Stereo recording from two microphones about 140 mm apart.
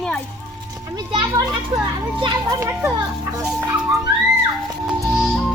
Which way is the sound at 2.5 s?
20° right (ahead or behind).